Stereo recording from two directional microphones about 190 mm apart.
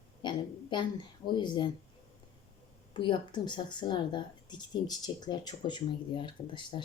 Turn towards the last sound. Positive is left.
turn(degrees=25)  # may be behind; listen again after turning